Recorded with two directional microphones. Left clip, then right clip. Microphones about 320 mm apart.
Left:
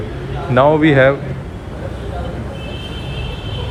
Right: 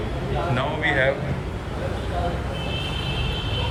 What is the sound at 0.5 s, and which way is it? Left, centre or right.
Speech, centre.